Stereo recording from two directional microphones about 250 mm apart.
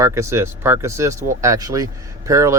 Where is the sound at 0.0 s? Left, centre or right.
Centre.